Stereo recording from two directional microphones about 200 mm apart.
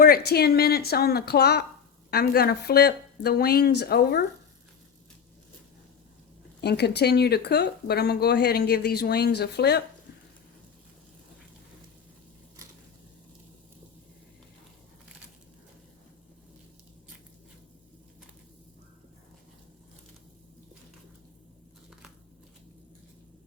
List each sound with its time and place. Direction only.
0.0 s speech: 50° left (ahead or behind)
6.6 s speech: 55° left (ahead or behind)